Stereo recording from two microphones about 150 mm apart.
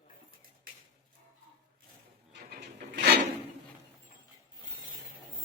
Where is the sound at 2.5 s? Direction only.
90° right.